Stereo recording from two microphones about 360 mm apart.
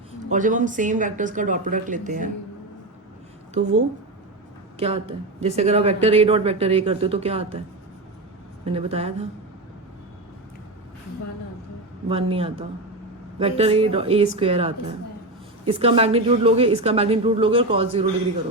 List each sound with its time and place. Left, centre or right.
0.3 s speech: right
4.8 s speech: centre
8.6 s speech: centre
12.0 s speech: centre